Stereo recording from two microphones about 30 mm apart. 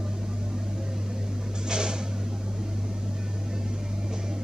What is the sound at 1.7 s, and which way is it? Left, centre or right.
Drawer open or close, right.